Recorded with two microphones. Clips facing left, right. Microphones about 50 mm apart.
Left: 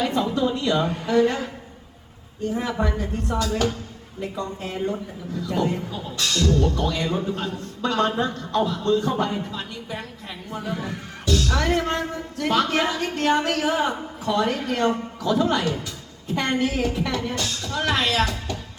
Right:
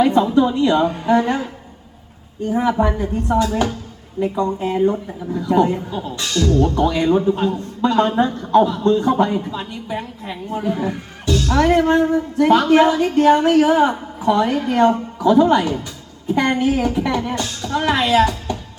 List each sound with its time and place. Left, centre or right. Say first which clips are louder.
0.0 s a sound: right 9 dB; right
0.5 s a woman's voice: right 7 dB; right
2.5 s a woman's voice: right 8 dB; right